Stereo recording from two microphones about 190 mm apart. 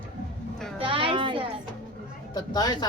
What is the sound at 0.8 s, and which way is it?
Speech, 30° right (ahead or behind).